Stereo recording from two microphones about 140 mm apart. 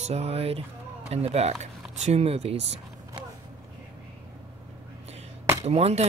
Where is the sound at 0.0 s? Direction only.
50° right (ahead or behind).